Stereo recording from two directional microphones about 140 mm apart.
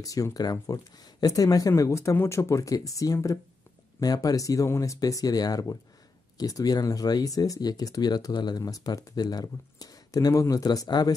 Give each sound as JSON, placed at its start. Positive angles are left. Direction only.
{"t": 0.0, "sound": "speech", "side_deg": 25}